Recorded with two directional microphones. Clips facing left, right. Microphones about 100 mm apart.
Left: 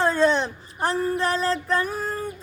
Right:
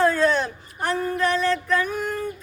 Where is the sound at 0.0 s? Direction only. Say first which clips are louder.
Right 1 dB; 25° left (ahead or behind).